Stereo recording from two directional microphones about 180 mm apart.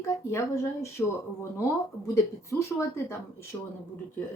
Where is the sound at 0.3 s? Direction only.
15° left (ahead or behind).